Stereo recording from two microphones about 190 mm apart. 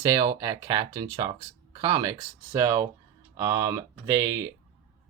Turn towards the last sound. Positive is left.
turn(degrees=-15)  # may be behind; listen again after turning